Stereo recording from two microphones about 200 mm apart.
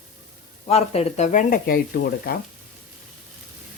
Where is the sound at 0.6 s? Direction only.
30° left (ahead or behind).